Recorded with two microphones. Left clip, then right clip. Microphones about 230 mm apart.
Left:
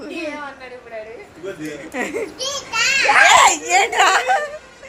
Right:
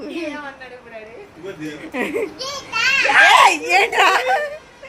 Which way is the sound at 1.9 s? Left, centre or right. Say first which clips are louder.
Right 2 dB; right.